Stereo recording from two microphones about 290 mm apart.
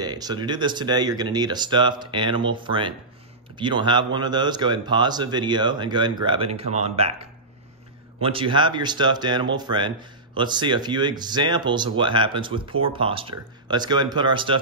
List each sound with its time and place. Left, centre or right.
0.0 s speech: centre